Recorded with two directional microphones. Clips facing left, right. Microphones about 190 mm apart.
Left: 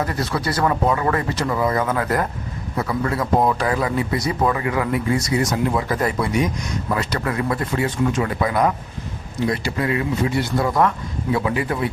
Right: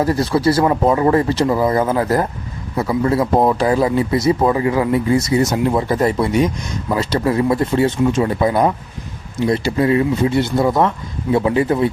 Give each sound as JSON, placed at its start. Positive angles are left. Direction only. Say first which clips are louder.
{"t": 0.0, "sound": "a man's voice", "louder": "right 8 dB", "side_deg": -30}